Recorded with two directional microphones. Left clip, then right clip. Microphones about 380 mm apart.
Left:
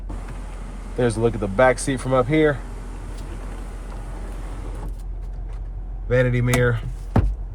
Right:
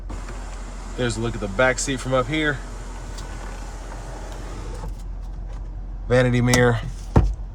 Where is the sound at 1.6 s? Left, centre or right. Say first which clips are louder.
Left 3 dB; centre.